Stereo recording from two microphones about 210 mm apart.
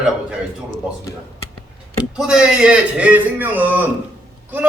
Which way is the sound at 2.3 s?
5° right (ahead or behind).